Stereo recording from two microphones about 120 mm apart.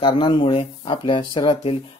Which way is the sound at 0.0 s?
45° left (ahead or behind).